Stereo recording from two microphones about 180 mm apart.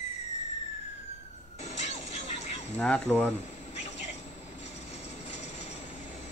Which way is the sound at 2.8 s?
5° left (ahead or behind).